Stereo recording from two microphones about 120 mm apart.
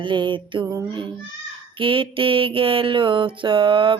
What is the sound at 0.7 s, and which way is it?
Speech, 40° right (ahead or behind).